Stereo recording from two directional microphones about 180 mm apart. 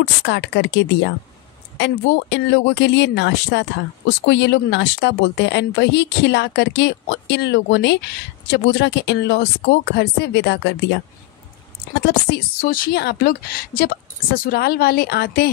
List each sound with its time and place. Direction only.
0.2 s speech: 75° left (ahead or behind)
11.9 s speech: 60° left (ahead or behind)